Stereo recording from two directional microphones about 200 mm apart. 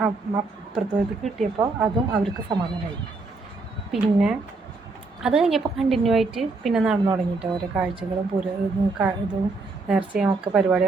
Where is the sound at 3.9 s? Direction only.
5° right (ahead or behind).